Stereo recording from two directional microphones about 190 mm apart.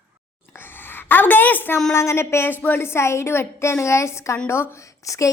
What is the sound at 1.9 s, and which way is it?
A woman's voice, 15° left (ahead or behind).